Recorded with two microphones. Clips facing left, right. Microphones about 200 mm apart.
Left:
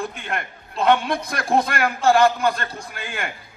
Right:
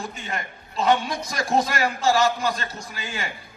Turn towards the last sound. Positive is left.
turn(degrees=55)  # may be behind; listen again after turning